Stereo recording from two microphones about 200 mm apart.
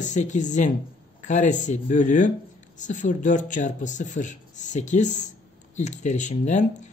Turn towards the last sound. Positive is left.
turn(degrees=35)  # may be behind; listen again after turning